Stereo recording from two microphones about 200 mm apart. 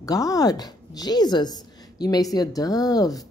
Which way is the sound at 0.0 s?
15° left (ahead or behind).